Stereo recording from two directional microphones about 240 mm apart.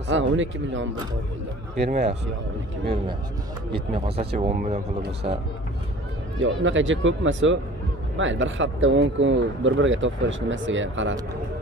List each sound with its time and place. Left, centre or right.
0.1 s speech: right
1.9 s speech: right
3.7 s speech: right
6.4 s speech: right